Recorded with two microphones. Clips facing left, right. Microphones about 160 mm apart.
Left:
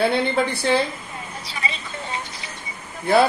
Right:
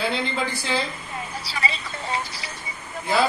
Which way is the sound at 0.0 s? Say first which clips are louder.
Left 6 dB; 60° left (ahead or behind).